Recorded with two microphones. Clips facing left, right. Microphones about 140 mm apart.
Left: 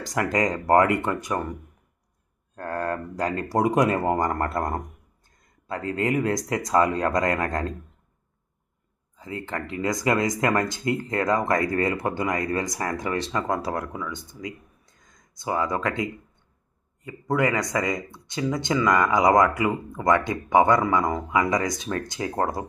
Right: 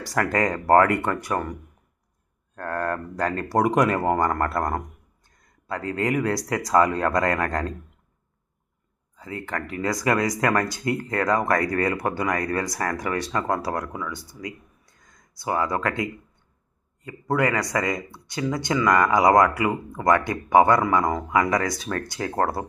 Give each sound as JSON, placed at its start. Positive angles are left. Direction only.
{"t": 0.0, "sound": "speech", "side_deg": 20}
{"t": 2.6, "sound": "speech", "side_deg": 15}
{"t": 9.1, "sound": "speech", "side_deg": 20}
{"t": 17.3, "sound": "speech", "side_deg": 20}
{"t": 19.6, "sound": "speech", "side_deg": -20}
{"t": 20.1, "sound": "speech", "side_deg": 20}